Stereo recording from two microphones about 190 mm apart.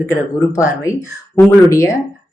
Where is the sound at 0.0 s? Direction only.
15° left (ahead or behind).